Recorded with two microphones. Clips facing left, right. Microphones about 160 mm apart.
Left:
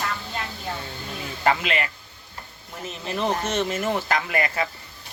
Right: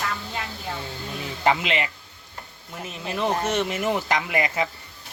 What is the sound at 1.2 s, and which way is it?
Speech, 20° right (ahead or behind).